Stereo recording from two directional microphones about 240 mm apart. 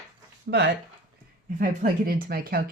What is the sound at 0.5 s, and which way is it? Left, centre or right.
Speech, right.